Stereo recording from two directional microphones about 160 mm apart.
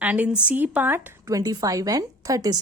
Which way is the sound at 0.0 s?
10° right (ahead or behind).